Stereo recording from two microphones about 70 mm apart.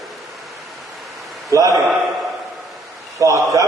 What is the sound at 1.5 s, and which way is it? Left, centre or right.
Speech, right.